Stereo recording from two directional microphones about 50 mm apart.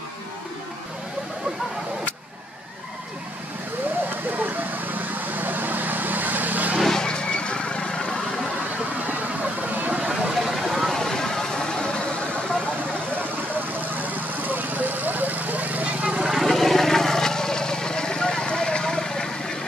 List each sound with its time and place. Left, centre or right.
4.4 s vehicle: right
6.9 s vehicle: centre
9.7 s vehicle: right
10.4 s vehicle: centre
13.7 s vehicle: right
16.3 s vehicle: centre